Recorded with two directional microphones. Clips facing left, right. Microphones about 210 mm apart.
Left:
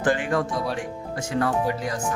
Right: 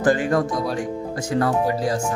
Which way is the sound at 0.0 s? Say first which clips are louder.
Right 4 dB; 40° right (ahead or behind).